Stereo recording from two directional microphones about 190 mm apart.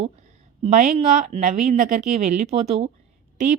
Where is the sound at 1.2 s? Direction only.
40° right (ahead or behind).